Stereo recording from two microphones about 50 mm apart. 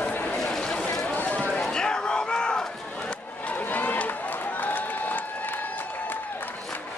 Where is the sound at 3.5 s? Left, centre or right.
Left.